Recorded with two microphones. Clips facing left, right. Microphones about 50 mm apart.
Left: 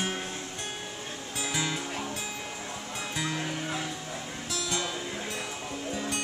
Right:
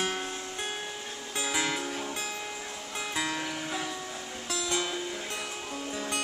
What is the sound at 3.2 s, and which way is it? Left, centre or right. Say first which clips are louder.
Music: right 1 dB; centre.